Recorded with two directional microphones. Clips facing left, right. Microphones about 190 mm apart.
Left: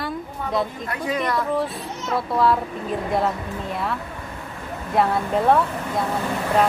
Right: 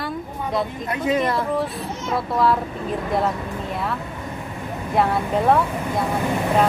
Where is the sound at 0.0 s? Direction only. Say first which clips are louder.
Right 1 dB; centre (ahead or behind).